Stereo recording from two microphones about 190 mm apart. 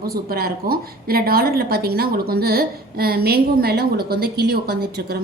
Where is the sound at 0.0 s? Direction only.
50° right (ahead or behind).